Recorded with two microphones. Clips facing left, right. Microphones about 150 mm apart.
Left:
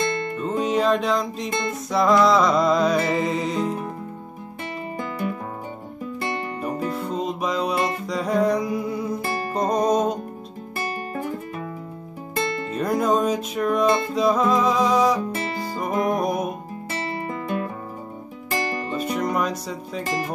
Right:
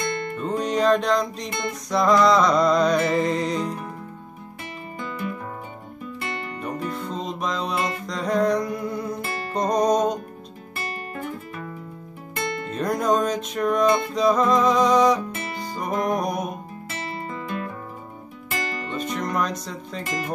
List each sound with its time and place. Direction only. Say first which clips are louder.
0.4 s music: left 1 dB; 5° left (ahead or behind)
6.6 s music: left 2 dB; 5° left (ahead or behind)
12.7 s music: left 1 dB; 5° left (ahead or behind)
15.3 s music: left 4 dB; 30° left (ahead or behind)
15.8 s music: left 1 dB; 5° left (ahead or behind)
17.0 s guitar: left 2 dB; 25° left (ahead or behind)
18.9 s music: left 2 dB; 5° left (ahead or behind)
19.7 s speech: left 3 dB; 10° left (ahead or behind)